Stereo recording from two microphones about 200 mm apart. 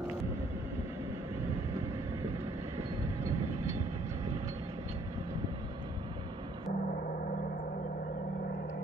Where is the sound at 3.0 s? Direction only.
15° right (ahead or behind).